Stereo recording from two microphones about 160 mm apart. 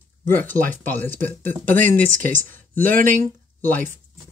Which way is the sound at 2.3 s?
10° left (ahead or behind).